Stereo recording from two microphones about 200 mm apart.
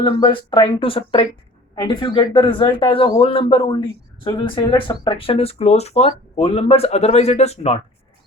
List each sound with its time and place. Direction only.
0.0 s speech: 25° left (ahead or behind)